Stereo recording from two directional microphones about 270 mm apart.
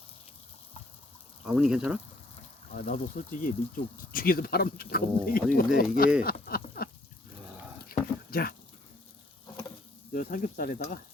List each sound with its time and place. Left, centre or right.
1.5 s speech: centre
2.7 s speech: left
6.2 s a sound: left
10.1 s speech: left